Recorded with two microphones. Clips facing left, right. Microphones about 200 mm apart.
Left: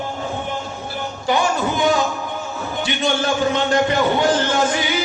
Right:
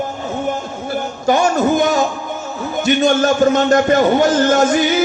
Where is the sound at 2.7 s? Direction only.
45° right (ahead or behind).